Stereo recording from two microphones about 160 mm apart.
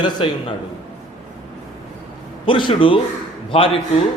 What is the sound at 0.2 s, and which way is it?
Speech, 35° left (ahead or behind).